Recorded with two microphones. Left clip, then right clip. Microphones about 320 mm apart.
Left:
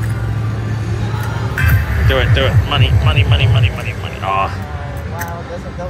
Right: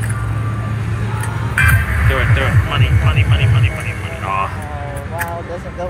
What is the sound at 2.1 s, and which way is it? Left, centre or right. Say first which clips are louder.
Speech: left 4 dB; centre.